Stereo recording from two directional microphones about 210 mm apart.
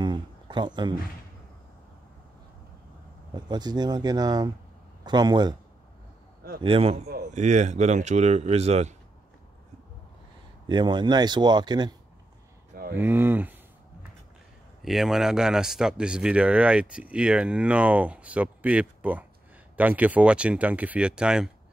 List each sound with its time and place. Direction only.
0.0 s a sound: 20° right (ahead or behind)
3.3 s speech: 20° right (ahead or behind)
6.6 s speech: 25° right (ahead or behind)
10.7 s speech: 20° right (ahead or behind)
12.9 s speech: 10° right (ahead or behind)
14.8 s speech: centre (ahead or behind)